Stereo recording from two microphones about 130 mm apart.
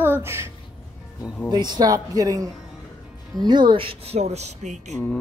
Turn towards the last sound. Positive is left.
turn(degrees=-65)  # may be behind; listen again after turning